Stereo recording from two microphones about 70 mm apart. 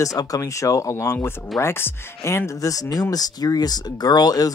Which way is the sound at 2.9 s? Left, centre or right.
Left.